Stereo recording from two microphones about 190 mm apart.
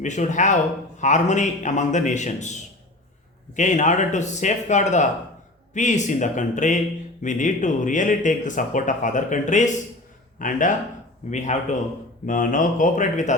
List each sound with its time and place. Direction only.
0.0 s a man's voice: 40° left (ahead or behind)